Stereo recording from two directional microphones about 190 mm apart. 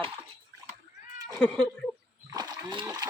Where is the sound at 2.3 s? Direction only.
20° right (ahead or behind).